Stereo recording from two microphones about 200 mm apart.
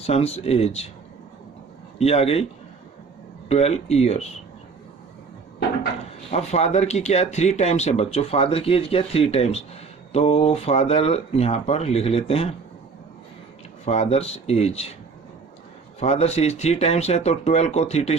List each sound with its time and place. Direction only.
0.0 s speech: 30° left (ahead or behind)
2.0 s speech: 30° left (ahead or behind)
3.5 s speech: 30° left (ahead or behind)
6.3 s speech: 35° left (ahead or behind)
13.8 s speech: 30° left (ahead or behind)
16.0 s speech: 30° left (ahead or behind)